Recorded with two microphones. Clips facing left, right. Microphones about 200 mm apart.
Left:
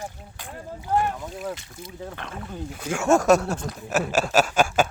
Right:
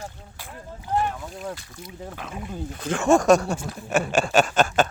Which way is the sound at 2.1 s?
10° right (ahead or behind).